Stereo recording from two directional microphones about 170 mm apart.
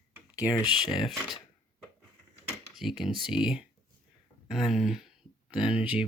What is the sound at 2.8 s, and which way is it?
Speech, centre (ahead or behind).